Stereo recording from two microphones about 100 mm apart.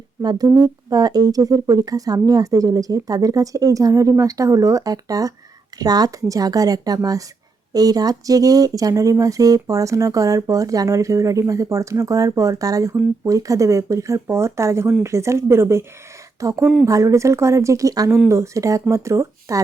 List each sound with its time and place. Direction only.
0.2 s speech: 40° right (ahead or behind)